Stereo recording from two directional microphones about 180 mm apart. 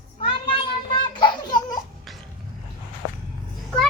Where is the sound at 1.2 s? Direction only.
25° left (ahead or behind).